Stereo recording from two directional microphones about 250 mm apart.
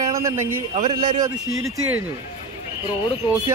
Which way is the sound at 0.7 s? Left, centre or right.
Right.